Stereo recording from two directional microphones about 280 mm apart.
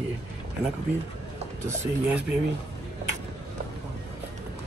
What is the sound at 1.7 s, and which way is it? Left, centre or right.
Speech, centre.